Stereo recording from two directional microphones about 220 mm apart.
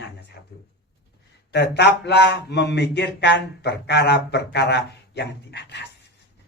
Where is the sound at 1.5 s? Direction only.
50° left (ahead or behind).